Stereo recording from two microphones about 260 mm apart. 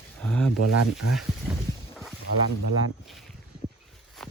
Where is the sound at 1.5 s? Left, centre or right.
Centre.